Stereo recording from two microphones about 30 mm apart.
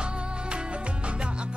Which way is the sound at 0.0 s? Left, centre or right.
Right.